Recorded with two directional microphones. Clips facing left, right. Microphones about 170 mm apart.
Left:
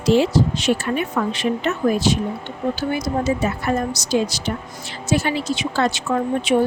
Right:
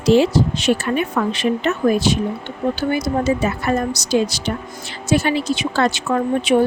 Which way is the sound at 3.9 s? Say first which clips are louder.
Right 2 dB; 65° right (ahead or behind).